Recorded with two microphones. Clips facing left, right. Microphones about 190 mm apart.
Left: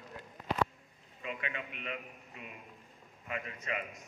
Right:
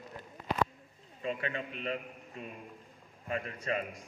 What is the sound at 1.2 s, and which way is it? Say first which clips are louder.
A man's voice: right 5 dB; 35° right (ahead or behind).